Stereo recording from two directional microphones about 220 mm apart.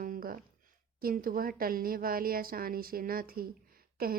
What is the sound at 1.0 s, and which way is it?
A woman's voice, 40° right (ahead or behind).